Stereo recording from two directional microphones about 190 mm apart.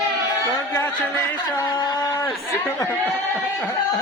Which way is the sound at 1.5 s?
20° left (ahead or behind).